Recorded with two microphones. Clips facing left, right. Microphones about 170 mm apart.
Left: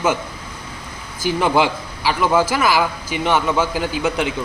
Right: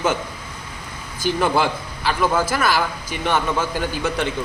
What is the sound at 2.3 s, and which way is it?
A man's voice, 10° left (ahead or behind).